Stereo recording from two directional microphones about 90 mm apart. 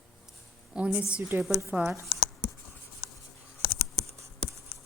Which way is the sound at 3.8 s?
40° right (ahead or behind).